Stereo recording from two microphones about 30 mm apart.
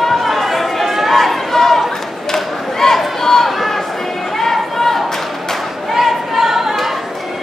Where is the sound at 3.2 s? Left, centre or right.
Centre.